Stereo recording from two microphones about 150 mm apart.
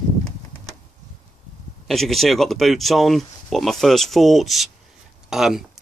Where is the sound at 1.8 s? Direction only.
Centre (ahead or behind).